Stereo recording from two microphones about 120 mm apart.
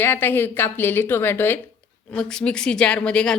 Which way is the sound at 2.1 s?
5° left (ahead or behind).